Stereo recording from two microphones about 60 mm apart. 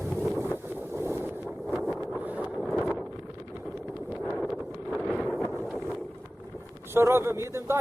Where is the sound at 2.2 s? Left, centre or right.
Right.